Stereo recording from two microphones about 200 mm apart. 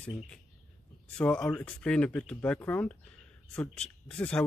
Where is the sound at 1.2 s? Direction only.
5° left (ahead or behind).